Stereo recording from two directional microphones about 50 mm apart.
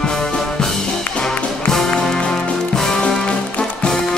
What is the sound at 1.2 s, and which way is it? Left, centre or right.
Music, centre.